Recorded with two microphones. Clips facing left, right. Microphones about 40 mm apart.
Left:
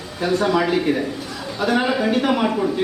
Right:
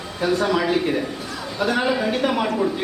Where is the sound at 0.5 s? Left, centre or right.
Centre.